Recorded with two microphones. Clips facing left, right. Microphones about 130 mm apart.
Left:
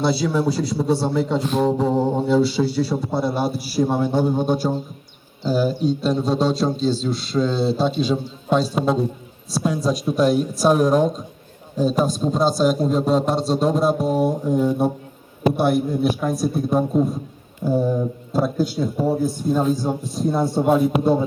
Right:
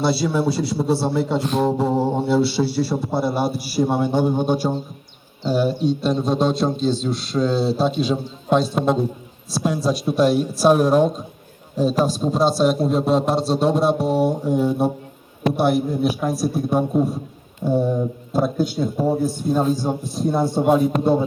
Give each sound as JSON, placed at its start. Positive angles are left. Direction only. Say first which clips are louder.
{"t": 0.0, "sound": "a man's voice", "louder": "even", "side_deg": -5}
{"t": 20.6, "sound": "speech", "louder": "right 1 dB", "side_deg": -10}